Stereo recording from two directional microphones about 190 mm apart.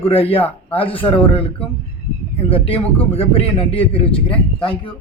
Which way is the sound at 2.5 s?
30° left (ahead or behind).